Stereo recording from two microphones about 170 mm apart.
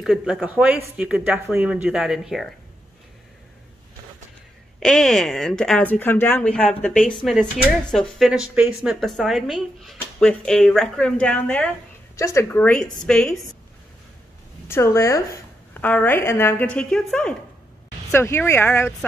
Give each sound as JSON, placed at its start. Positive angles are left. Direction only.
{"t": 0.0, "sound": "speech", "side_deg": 0}
{"t": 4.7, "sound": "speech", "side_deg": 5}
{"t": 14.7, "sound": "a woman's voice", "side_deg": 15}